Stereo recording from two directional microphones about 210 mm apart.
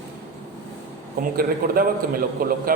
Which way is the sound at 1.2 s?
45° right (ahead or behind).